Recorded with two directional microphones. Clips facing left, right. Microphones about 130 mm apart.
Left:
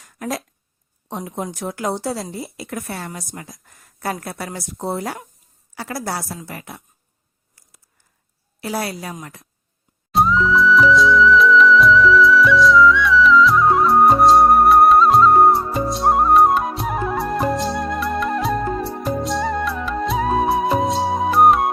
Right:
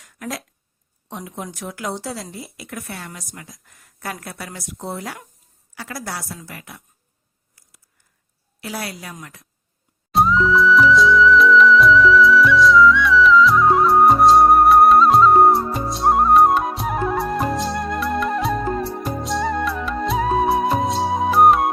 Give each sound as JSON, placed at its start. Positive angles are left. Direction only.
{"t": 0.0, "sound": "a sound", "side_deg": 30}
{"t": 1.1, "sound": "a woman's voice", "side_deg": 30}
{"t": 8.6, "sound": "a woman's voice", "side_deg": 30}
{"t": 10.1, "sound": "music", "side_deg": 0}